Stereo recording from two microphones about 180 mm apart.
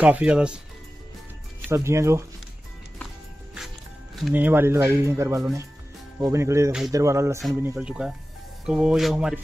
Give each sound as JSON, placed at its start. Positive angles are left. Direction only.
{"t": 0.0, "sound": "speech", "side_deg": -5}
{"t": 1.7, "sound": "speech", "side_deg": -15}
{"t": 3.5, "sound": "speech", "side_deg": 0}
{"t": 7.6, "sound": "speech", "side_deg": -5}